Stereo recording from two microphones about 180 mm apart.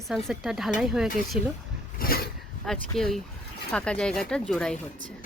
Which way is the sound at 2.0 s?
55° left (ahead or behind).